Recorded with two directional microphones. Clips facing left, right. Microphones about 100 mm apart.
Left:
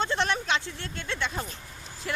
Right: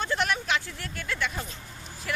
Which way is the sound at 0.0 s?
25° left (ahead or behind).